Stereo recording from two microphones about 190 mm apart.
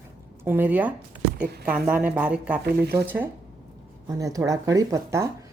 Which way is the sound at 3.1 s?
10° right (ahead or behind).